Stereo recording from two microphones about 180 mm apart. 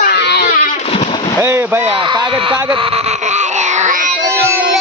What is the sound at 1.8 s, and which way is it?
Baby cry, 30° right (ahead or behind).